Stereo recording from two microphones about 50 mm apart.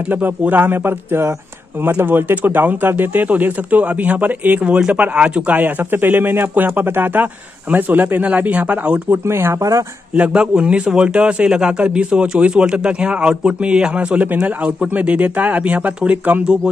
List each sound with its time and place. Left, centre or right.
0.1 s speech: right
8.4 s a man's voice: right
9.1 s speech: right
10.1 s a man's voice: right
14.2 s speech: right
14.6 s a man's voice: right